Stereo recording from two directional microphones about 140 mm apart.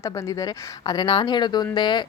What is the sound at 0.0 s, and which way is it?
A woman's voice, 25° left (ahead or behind).